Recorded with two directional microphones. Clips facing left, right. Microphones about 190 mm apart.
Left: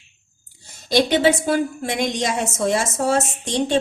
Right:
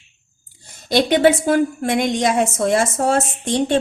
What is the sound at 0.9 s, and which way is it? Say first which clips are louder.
A woman's voice: right 2 dB; 55° right (ahead or behind).